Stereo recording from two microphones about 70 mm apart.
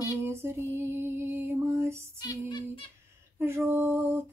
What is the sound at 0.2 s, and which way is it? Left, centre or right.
Music, right.